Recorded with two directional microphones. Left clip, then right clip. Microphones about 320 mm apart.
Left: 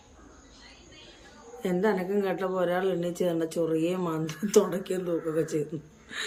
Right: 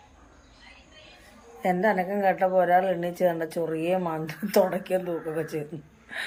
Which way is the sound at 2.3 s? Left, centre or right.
Left.